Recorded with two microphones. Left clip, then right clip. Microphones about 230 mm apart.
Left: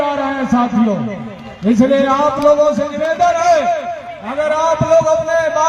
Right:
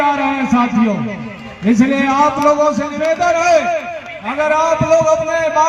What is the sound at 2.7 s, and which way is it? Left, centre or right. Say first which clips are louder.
A man's voice: even; left.